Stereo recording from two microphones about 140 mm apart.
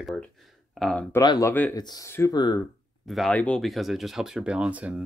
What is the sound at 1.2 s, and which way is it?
Speech, 25° left (ahead or behind).